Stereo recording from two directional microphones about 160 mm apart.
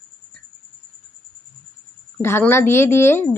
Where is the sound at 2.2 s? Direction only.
15° left (ahead or behind).